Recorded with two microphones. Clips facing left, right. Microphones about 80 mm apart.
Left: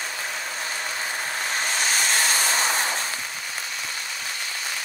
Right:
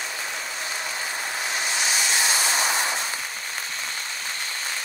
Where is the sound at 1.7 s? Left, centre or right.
Left.